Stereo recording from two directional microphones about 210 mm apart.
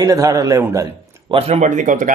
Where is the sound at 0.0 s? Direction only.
15° right (ahead or behind).